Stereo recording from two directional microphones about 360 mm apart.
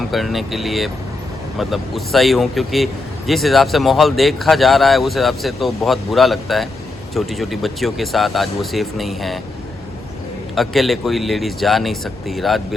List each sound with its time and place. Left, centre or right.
0.1 s speech: centre
10.5 s speech: centre